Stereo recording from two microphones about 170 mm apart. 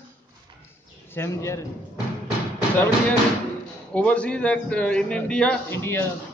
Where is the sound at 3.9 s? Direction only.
10° left (ahead or behind).